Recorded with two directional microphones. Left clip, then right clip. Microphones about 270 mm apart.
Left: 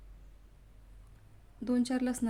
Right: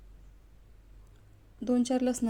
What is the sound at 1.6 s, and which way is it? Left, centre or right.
Speech, centre.